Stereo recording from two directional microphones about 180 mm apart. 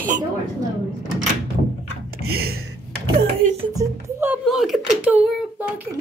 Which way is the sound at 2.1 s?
60° right (ahead or behind).